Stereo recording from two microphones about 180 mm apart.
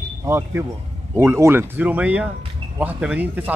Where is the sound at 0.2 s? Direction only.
15° right (ahead or behind).